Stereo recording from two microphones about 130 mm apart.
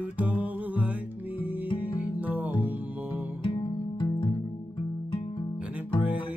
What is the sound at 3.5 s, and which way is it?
Music, 35° left (ahead or behind).